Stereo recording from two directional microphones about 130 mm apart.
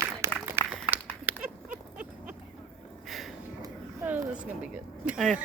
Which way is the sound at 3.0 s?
Centre (ahead or behind).